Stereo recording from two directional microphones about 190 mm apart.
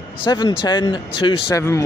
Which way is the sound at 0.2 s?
25° left (ahead or behind).